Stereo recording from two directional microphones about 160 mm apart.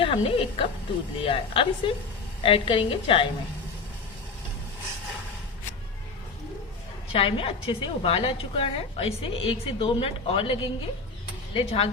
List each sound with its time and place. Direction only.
0.0 s a woman's voice: 35° left (ahead or behind)
7.1 s a woman's voice: 35° left (ahead or behind)